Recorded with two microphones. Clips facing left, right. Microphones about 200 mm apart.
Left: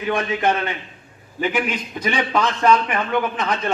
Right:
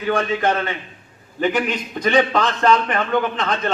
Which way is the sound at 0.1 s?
15° left (ahead or behind).